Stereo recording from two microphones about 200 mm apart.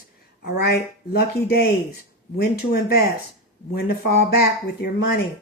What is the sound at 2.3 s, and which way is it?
Speech, 55° left (ahead or behind).